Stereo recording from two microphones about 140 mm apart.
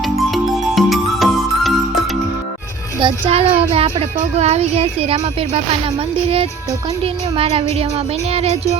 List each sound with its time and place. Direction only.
0.0 s music: centre (ahead or behind)
3.0 s speech: 45° right (ahead or behind)
7.0 s speech: 45° right (ahead or behind)